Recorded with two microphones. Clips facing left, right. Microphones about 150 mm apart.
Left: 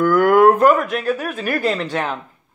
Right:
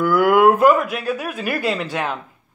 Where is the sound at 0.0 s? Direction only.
10° right (ahead or behind).